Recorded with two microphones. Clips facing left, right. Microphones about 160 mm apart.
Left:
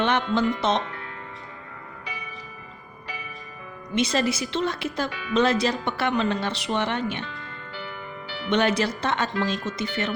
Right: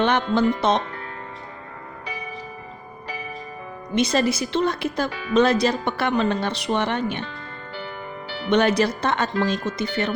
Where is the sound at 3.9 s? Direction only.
40° right (ahead or behind).